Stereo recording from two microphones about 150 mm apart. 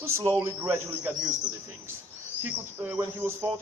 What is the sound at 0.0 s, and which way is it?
A man's voice, 20° right (ahead or behind).